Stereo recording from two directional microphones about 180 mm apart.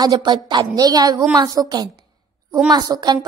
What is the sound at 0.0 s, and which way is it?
Speech, 25° right (ahead or behind).